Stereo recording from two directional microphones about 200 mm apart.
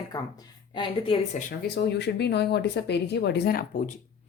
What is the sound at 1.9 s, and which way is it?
Speech, 55° left (ahead or behind).